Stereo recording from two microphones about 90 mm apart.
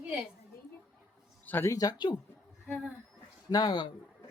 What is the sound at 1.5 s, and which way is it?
Speech, 25° left (ahead or behind).